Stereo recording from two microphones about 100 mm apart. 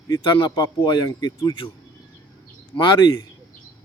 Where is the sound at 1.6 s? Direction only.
30° left (ahead or behind).